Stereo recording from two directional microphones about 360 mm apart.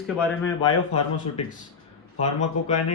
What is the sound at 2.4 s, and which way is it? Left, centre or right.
Speech, centre.